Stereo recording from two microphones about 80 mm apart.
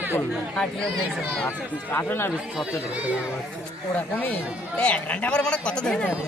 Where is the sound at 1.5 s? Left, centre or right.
Left.